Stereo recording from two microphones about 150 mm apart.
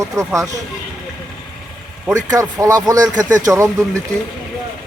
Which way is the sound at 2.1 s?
25° right (ahead or behind).